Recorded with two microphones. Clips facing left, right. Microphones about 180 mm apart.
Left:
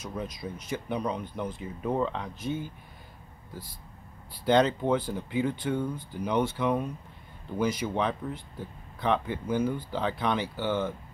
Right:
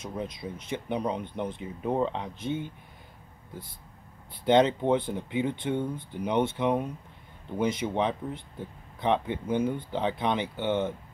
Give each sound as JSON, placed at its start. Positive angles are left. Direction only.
{"t": 0.0, "sound": "speech", "side_deg": -25}
{"t": 4.3, "sound": "speech", "side_deg": -20}